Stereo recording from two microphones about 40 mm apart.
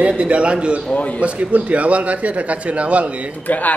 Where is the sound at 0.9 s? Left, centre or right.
Left.